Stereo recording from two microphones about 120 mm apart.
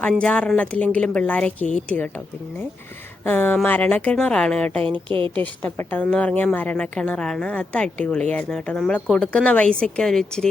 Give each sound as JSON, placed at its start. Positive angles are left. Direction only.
{"t": 0.2, "sound": "a woman's voice", "side_deg": 10}
{"t": 3.2, "sound": "a woman's voice", "side_deg": 15}
{"t": 4.8, "sound": "speech", "side_deg": -45}
{"t": 5.3, "sound": "a woman's voice", "side_deg": 10}